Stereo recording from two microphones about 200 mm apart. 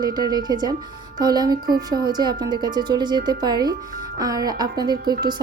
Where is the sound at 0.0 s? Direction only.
20° right (ahead or behind).